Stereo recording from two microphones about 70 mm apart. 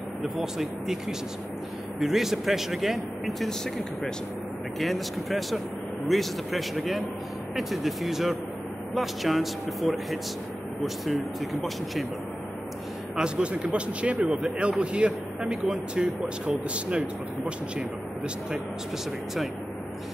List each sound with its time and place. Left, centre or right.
0.2 s speech: centre
13.1 s speech: centre